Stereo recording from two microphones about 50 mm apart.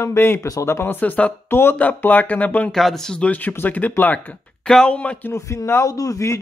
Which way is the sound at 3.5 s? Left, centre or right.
Left.